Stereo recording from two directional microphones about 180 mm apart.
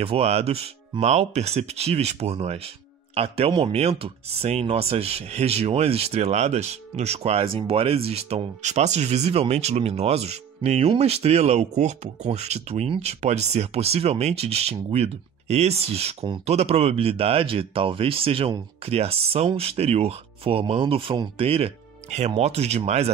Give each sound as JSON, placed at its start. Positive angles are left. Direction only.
{"t": 0.0, "sound": "speech", "side_deg": -35}